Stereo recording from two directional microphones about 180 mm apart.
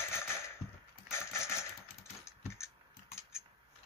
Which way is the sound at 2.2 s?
15° left (ahead or behind).